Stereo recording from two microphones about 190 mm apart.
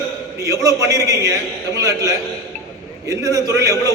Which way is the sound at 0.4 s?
15° right (ahead or behind).